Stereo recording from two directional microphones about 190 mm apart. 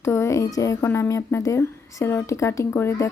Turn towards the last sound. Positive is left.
turn(degrees=15)  # may be behind; listen again after turning